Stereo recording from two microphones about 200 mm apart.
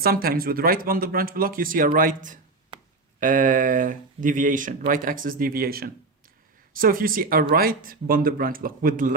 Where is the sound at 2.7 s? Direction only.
25° right (ahead or behind).